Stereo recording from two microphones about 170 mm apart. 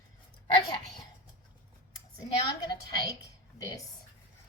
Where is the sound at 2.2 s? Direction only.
25° left (ahead or behind).